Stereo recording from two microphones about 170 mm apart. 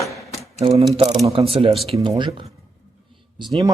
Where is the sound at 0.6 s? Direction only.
40° right (ahead or behind).